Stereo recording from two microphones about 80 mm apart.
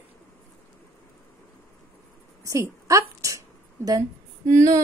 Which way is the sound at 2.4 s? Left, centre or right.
Right.